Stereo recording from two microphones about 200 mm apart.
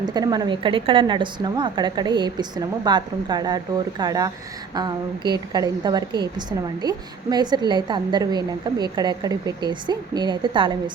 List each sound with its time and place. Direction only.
0.0 s a woman's voice: 20° right (ahead or behind)